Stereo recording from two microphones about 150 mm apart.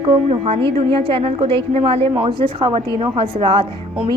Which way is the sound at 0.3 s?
45° right (ahead or behind).